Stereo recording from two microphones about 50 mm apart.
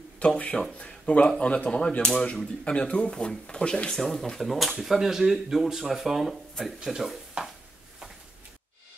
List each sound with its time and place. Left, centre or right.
0.2 s speech: left
3.9 s speech: centre